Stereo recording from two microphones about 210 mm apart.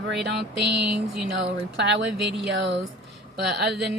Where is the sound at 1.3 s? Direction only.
55° right (ahead or behind).